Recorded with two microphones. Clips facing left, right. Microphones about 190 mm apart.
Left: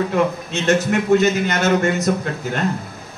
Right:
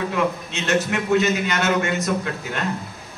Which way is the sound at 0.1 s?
40° left (ahead or behind).